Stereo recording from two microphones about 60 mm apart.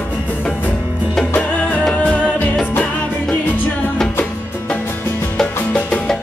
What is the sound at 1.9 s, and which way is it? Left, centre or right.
Music, centre.